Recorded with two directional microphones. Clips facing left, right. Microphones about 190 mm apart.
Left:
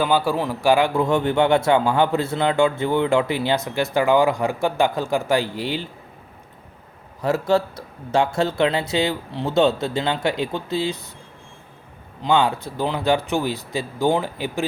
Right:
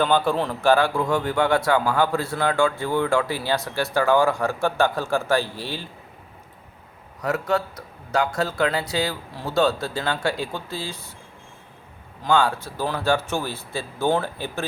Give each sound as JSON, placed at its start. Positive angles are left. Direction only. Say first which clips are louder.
{"t": 0.0, "sound": "speech", "louder": "left 1 dB", "side_deg": 10}
{"t": 7.2, "sound": "speech", "louder": "left 4 dB", "side_deg": 30}
{"t": 12.2, "sound": "speech", "louder": "left 2 dB", "side_deg": 20}